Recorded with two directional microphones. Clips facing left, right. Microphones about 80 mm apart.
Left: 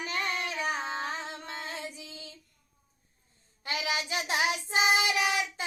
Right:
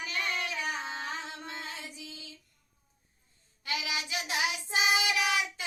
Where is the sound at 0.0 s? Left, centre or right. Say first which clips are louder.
Left 2 dB; left.